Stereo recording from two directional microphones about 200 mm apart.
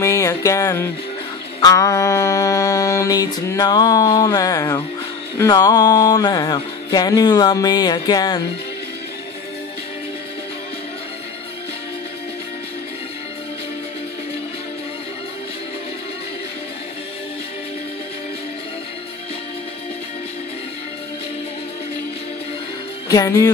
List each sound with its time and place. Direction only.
0.0 s music: 15° left (ahead or behind)
5.4 s a sound: 20° left (ahead or behind)
23.0 s speech: 15° left (ahead or behind)